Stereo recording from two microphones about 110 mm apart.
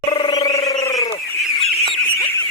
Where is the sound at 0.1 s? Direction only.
45° left (ahead or behind).